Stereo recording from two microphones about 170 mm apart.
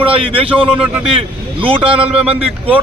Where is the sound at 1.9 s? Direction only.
5° right (ahead or behind).